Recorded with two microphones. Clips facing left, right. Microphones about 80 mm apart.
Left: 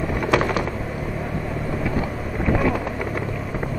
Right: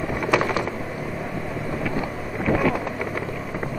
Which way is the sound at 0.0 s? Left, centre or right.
Centre.